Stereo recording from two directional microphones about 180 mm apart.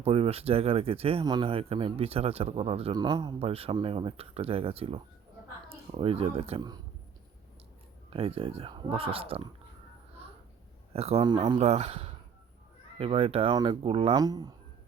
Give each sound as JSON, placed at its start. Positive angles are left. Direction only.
{"t": 0.0, "sound": "speech", "side_deg": -35}
{"t": 8.1, "sound": "speech", "side_deg": -30}
{"t": 10.9, "sound": "speech", "side_deg": -35}